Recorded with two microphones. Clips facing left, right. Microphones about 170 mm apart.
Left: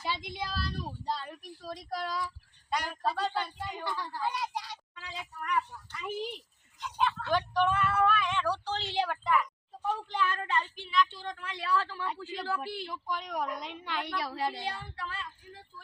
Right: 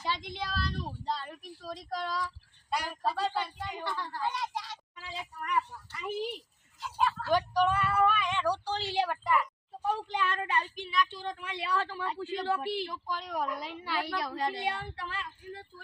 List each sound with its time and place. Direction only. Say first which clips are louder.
0.0 s a sound: right 1 dB; 10° left (ahead or behind)
1.9 s speech: even; 5° left (ahead or behind); by 12.8 s 25° right (ahead or behind)
12.8 s speech: even; centre (ahead or behind)